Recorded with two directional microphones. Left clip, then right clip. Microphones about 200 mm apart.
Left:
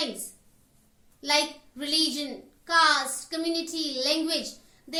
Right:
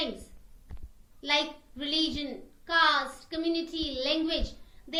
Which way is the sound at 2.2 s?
Centre (ahead or behind).